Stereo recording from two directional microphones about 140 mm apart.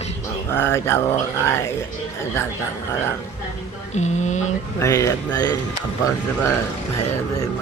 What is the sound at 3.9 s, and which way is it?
Mantra, 55° left (ahead or behind).